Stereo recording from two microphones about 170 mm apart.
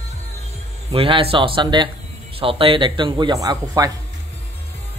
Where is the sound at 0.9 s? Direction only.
35° right (ahead or behind).